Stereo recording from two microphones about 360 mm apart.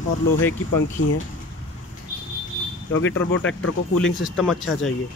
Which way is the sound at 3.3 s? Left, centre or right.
Left.